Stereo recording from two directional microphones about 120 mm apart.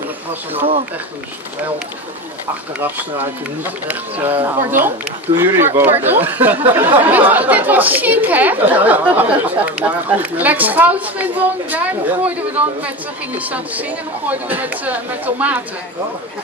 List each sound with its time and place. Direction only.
2.8 s speech: 15° right (ahead or behind)
13.4 s speech: 15° right (ahead or behind)